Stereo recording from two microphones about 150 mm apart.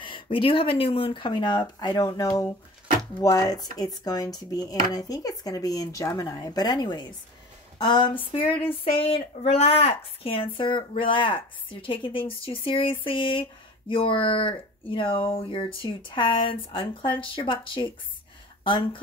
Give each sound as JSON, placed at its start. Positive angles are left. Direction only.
{"t": 0.0, "sound": "speech", "side_deg": 35}